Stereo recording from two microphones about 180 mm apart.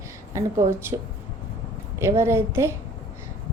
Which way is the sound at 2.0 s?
15° right (ahead or behind).